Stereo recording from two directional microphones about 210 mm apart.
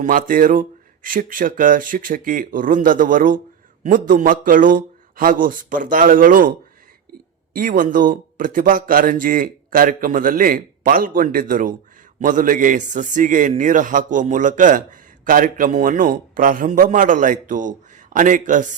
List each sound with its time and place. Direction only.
0.0 s a man's voice: 40° right (ahead or behind)